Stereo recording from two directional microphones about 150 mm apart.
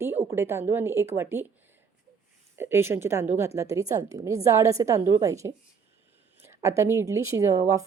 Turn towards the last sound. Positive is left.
turn(degrees=-20)  # may be behind; listen again after turning